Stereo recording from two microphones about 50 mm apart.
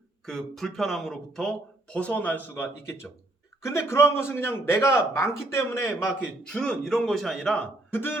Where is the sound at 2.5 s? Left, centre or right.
Left.